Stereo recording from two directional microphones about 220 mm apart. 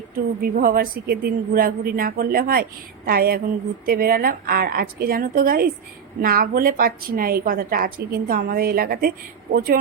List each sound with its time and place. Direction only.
0.1 s a woman's voice: 40° right (ahead or behind)
3.1 s a sound: 45° right (ahead or behind)
3.8 s a woman's voice: 40° right (ahead or behind)